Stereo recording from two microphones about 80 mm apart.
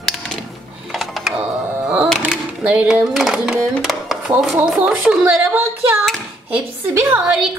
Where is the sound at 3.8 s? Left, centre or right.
Centre.